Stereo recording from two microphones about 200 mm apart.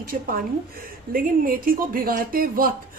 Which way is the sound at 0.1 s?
45° right (ahead or behind).